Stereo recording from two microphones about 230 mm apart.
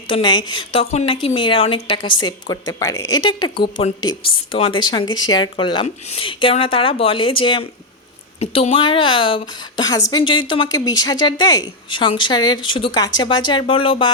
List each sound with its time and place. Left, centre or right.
0.1 s speech: centre